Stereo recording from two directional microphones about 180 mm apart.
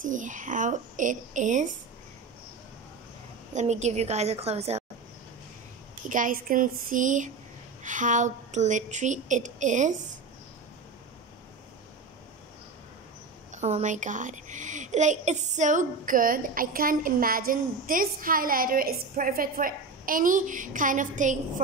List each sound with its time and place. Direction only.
0.0 s a woman's voice: 45° right (ahead or behind)
3.5 s a woman's voice: 40° right (ahead or behind)
6.0 s a woman's voice: 45° right (ahead or behind)
13.5 s a woman's voice: 40° right (ahead or behind)